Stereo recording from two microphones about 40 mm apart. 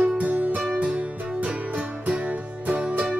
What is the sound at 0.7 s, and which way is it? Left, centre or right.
Music, right.